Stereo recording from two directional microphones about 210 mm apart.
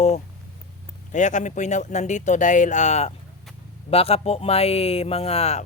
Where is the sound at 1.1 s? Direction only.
35° left (ahead or behind).